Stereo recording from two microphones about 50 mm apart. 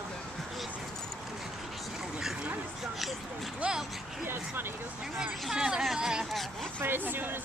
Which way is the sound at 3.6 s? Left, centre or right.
Centre.